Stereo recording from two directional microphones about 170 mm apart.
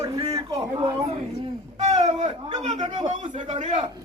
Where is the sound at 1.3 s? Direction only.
40° right (ahead or behind).